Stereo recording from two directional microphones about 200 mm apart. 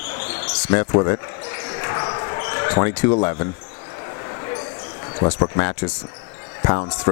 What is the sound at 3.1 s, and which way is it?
Speech, 25° left (ahead or behind).